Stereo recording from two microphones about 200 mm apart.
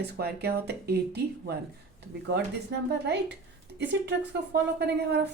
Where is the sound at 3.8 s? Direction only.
60° right (ahead or behind).